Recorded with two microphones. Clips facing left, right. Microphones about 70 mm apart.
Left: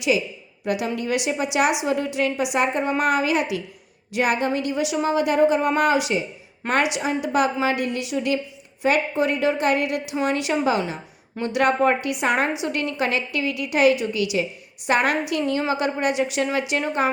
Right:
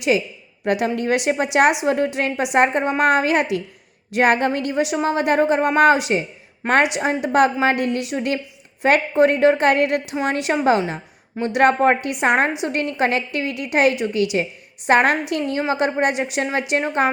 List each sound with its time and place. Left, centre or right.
0.6 s a woman's voice: right
4.7 s a woman's voice: right
6.6 s a woman's voice: centre
7.0 s a woman's voice: right
10.2 s a woman's voice: right